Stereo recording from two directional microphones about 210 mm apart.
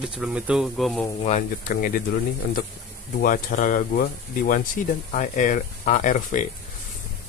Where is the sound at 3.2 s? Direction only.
40° left (ahead or behind).